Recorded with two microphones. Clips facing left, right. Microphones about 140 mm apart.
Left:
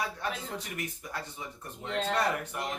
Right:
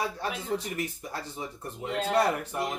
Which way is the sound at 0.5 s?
30° right (ahead or behind).